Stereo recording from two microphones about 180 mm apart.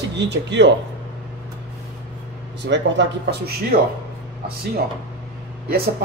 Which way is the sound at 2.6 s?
75° right (ahead or behind).